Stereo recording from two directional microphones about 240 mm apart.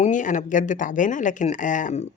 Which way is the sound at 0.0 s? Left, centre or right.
Left.